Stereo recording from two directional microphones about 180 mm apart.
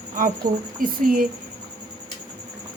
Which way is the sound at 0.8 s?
55° right (ahead or behind).